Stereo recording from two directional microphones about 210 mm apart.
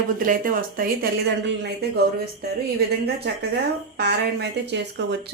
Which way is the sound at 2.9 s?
50° right (ahead or behind).